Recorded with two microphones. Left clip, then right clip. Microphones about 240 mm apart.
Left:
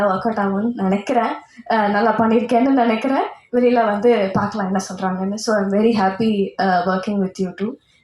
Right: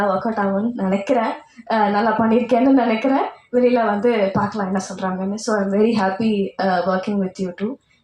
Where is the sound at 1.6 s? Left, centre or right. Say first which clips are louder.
Left 1 dB; left.